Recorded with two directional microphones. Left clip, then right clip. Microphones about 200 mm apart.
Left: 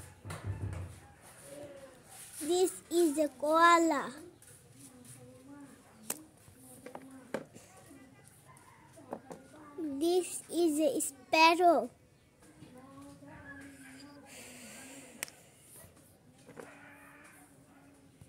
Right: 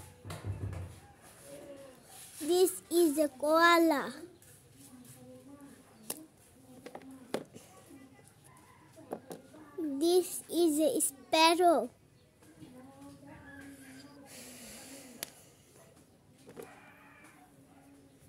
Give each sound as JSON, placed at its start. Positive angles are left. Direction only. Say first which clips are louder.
{"t": 2.4, "sound": "a child's voice", "louder": "right 2 dB", "side_deg": -10}
{"t": 9.9, "sound": "a child's voice", "louder": "right 3 dB", "side_deg": -10}